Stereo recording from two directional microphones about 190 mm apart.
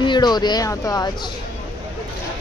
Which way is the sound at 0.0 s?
25° left (ahead or behind).